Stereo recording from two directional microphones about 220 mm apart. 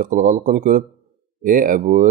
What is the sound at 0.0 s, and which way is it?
Speech, 40° right (ahead or behind).